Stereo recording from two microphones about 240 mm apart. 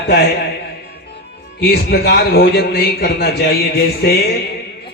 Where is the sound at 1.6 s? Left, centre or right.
Left.